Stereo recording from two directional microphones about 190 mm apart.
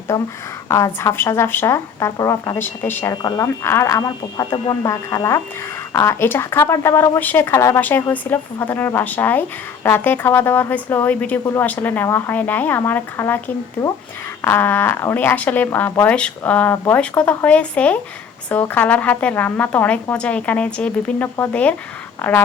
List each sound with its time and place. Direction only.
0.1 s a woman's voice: 20° left (ahead or behind)